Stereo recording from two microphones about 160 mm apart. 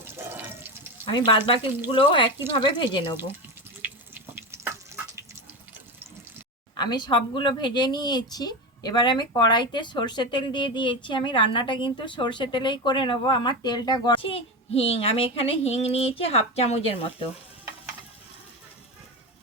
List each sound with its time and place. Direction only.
0.0 s toilet flush: 15° right (ahead or behind)
1.1 s speech: 25° left (ahead or behind)
3.8 s water: 10° right (ahead or behind)
6.7 s speech: 25° left (ahead or behind)